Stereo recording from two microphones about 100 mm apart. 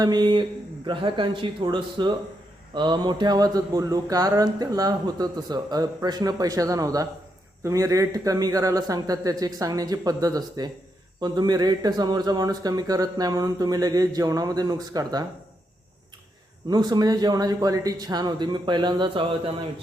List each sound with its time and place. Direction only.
0.0 s a man's voice: 45° right (ahead or behind)
16.6 s a man's voice: 40° right (ahead or behind)